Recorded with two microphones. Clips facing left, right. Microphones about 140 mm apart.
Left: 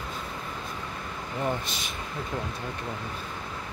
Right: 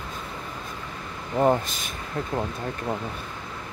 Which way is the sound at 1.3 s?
45° right (ahead or behind).